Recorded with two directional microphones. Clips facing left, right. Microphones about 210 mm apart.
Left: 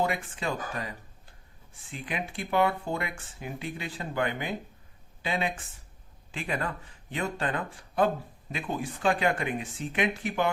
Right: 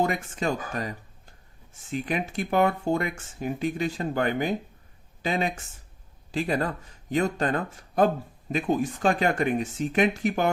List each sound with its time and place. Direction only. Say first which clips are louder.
0.0 s speech: right 4 dB; 45° right (ahead or behind)